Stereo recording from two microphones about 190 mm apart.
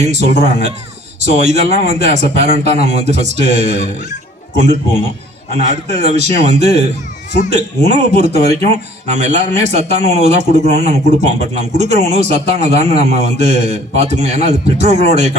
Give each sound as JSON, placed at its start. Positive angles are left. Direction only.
{"t": 0.0, "sound": "a man's voice", "side_deg": -35}